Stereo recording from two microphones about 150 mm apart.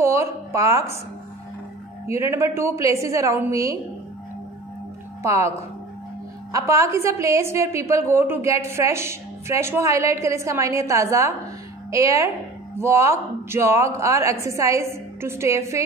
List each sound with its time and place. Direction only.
0.0 s a woman's voice: 20° right (ahead or behind)
2.0 s a woman's voice: 20° right (ahead or behind)
5.2 s a woman's voice: 20° right (ahead or behind)
6.5 s a woman's voice: 20° right (ahead or behind)